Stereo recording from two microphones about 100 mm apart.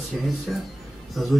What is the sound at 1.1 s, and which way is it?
Speech, centre (ahead or behind).